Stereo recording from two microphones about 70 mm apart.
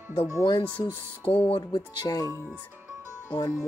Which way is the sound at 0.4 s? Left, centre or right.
Left.